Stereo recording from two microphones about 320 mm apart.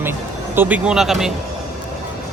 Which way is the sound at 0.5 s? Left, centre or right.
Centre.